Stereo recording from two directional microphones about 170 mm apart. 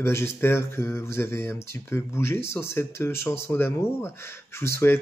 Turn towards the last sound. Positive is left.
turn(degrees=15)  # may be behind; listen again after turning